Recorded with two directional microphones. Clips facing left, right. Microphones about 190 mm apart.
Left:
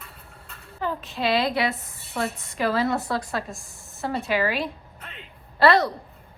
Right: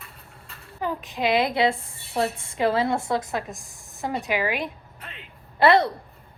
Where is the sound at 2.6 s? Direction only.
25° right (ahead or behind).